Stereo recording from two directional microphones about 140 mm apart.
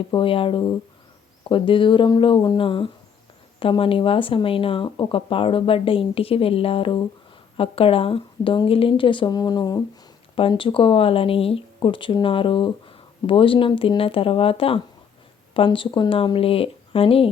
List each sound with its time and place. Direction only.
0.1 s speech: 40° left (ahead or behind)